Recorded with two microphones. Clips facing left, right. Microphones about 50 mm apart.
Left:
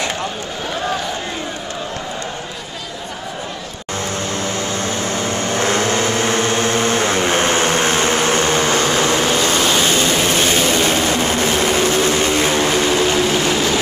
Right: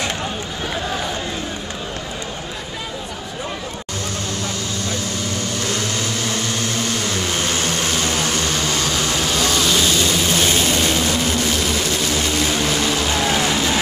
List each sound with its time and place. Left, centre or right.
4.3 s vehicle: left